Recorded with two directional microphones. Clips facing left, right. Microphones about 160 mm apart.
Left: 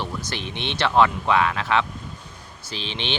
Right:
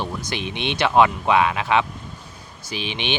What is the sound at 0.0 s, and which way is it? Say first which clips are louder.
Speech: right 2 dB; 15° right (ahead or behind).